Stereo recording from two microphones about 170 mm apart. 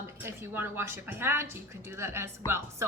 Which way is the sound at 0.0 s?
15° right (ahead or behind).